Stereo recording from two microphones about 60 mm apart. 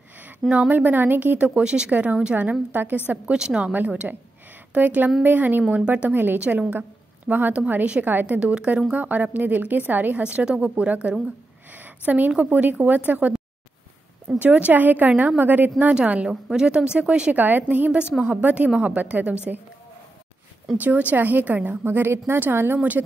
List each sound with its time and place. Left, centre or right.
0.5 s speech: right
1.6 s a woman's voice: centre
3.3 s a woman's voice: centre; by 8.4 s right
8.4 s a woman's voice: right
12.4 s a woman's voice: right
14.4 s a woman's voice: right
15.9 s a woman's voice: right
17.4 s a woman's voice: right
20.7 s a woman's voice: right